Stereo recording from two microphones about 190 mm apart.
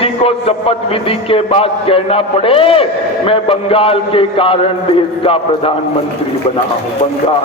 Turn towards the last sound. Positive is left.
turn(degrees=30)  # may be behind; listen again after turning